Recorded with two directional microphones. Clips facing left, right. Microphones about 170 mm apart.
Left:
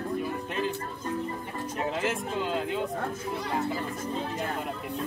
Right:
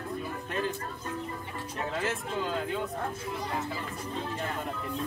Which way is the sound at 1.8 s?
20° left (ahead or behind).